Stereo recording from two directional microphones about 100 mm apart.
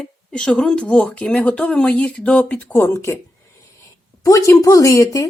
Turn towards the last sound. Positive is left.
turn(degrees=35)  # may be behind; listen again after turning